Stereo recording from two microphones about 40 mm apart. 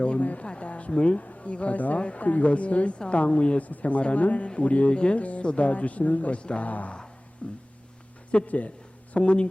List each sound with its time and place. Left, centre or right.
0.0 s speech: left
3.7 s speech: left
6.7 s speech: left
7.4 s speech: left